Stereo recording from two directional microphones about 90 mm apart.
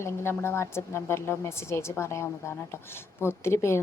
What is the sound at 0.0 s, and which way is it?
A woman's voice, 30° left (ahead or behind).